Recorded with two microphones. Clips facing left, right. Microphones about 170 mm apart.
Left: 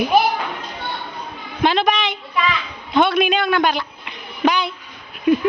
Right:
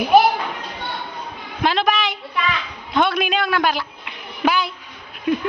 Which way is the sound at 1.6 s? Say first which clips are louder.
Left 2 dB; centre (ahead or behind).